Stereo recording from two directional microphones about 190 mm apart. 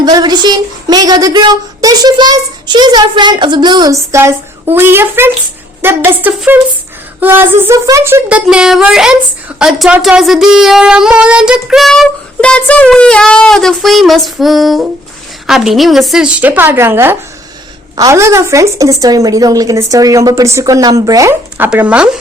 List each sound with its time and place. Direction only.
0.0 s speech: 20° right (ahead or behind)
21.7 s speech: 5° right (ahead or behind)